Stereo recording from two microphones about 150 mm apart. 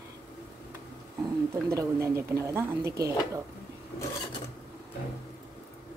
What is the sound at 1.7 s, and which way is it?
A woman's voice, 20° right (ahead or behind).